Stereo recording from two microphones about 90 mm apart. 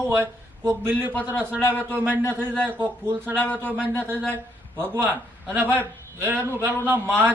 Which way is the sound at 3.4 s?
15° left (ahead or behind).